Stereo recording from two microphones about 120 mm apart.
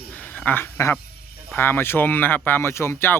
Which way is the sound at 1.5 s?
15° left (ahead or behind).